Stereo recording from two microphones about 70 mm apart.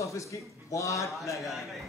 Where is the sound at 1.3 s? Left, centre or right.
Centre.